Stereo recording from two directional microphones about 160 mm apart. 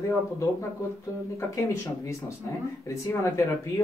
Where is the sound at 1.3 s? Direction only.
15° left (ahead or behind).